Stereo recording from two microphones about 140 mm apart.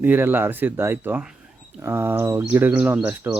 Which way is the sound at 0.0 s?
15° right (ahead or behind).